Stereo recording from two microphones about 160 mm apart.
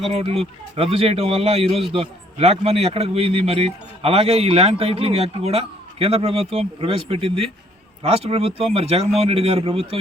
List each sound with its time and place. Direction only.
0.1 s a man's voice: 40° right (ahead or behind)